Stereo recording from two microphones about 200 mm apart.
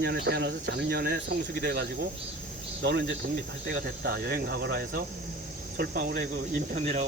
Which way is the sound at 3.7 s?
45° right (ahead or behind).